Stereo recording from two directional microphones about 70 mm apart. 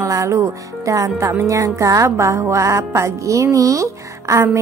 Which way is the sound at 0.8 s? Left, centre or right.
Right.